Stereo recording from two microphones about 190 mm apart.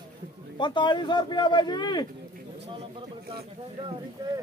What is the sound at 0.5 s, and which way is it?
Speech, 25° left (ahead or behind).